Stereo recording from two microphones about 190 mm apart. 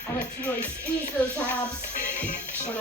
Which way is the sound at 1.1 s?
10° left (ahead or behind).